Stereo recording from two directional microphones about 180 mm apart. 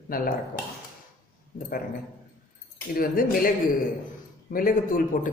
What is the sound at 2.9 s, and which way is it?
Speech, 50° left (ahead or behind).